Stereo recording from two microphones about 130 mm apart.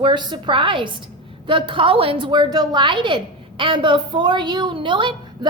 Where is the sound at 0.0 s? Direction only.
35° right (ahead or behind).